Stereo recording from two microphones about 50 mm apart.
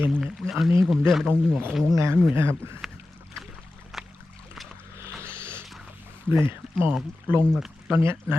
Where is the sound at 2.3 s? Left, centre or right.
Right.